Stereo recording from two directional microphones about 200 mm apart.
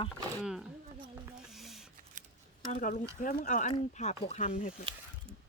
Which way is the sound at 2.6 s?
40° left (ahead or behind).